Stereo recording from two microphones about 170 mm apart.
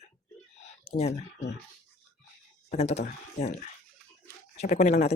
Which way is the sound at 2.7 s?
40° left (ahead or behind).